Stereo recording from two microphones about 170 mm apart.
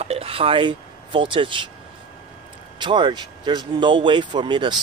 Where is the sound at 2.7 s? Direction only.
25° right (ahead or behind).